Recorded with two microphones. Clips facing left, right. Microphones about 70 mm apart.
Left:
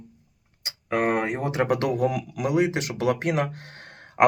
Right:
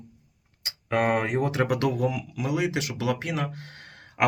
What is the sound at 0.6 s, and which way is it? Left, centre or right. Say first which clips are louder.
Speech: even; centre.